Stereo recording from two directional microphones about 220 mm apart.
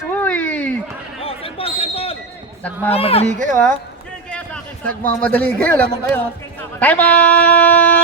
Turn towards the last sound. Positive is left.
turn(degrees=5)  # may be behind; listen again after turning